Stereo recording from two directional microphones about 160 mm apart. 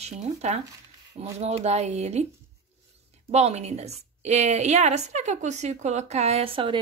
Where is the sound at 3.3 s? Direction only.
45° right (ahead or behind).